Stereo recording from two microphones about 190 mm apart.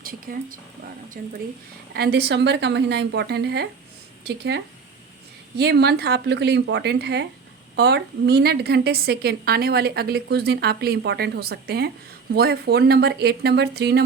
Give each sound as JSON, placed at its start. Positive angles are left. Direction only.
{"t": 0.0, "sound": "a woman's voice", "side_deg": -50}